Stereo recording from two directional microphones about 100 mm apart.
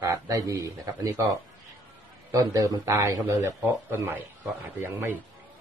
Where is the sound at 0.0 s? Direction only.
30° right (ahead or behind).